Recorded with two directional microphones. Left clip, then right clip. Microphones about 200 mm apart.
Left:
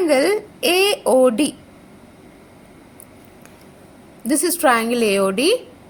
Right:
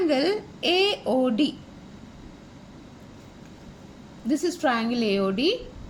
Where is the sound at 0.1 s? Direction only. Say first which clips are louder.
Left 7 dB; 30° left (ahead or behind).